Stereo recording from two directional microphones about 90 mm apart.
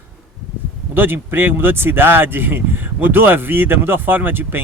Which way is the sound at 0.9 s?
25° right (ahead or behind).